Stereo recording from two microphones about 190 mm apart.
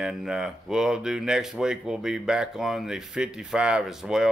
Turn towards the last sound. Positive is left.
turn(degrees=0)  # may be behind; listen again after turning